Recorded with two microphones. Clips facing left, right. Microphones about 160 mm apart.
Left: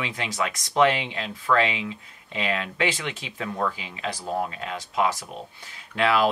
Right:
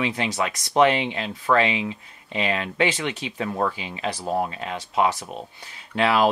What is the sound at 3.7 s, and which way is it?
Speech, 25° right (ahead or behind).